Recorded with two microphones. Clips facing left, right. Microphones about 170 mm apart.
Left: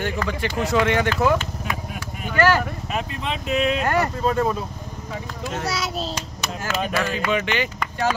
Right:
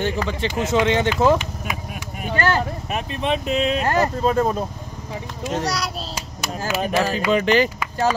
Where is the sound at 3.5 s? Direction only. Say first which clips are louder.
Left 2 dB; 30° right (ahead or behind).